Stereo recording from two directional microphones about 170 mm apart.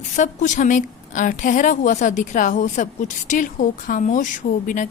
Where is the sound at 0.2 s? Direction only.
45° left (ahead or behind).